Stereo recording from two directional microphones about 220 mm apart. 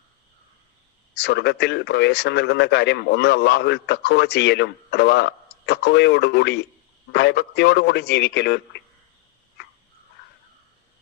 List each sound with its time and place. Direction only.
1.1 s a man's voice: 50° left (ahead or behind)